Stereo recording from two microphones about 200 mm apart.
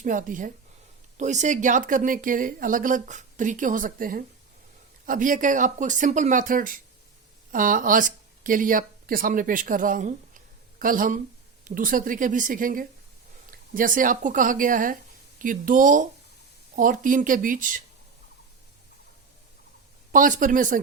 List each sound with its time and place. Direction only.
0.0 s a woman's voice: 40° right (ahead or behind)
20.1 s speech: 40° right (ahead or behind)